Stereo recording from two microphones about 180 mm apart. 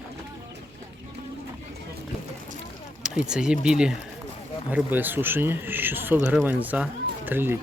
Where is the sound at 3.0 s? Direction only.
5° right (ahead or behind).